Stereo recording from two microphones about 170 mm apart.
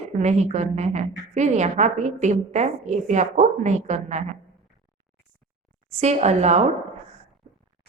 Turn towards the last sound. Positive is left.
turn(degrees=-40)  # may be behind; listen again after turning